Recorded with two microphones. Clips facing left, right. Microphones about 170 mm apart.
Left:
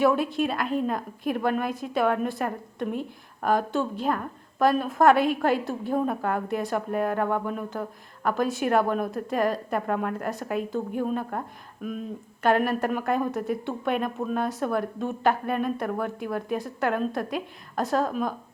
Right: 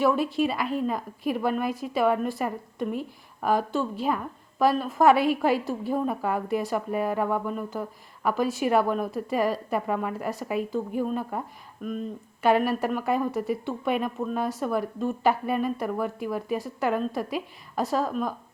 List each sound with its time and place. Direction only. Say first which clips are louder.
0.0 s a woman's voice: left 1 dB; centre (ahead or behind)